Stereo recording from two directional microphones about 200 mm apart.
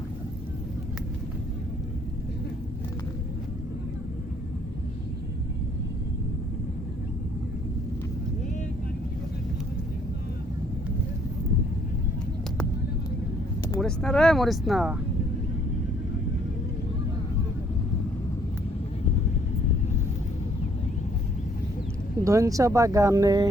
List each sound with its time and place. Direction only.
13.7 s speech: 5° left (ahead or behind)
22.2 s speech: 15° right (ahead or behind)